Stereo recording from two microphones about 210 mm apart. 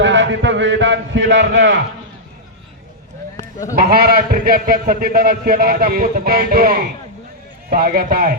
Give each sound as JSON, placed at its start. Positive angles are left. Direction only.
{"t": 0.0, "sound": "a man's voice", "side_deg": -60}
{"t": 3.3, "sound": "sheep", "side_deg": 15}
{"t": 3.8, "sound": "a man's voice", "side_deg": -45}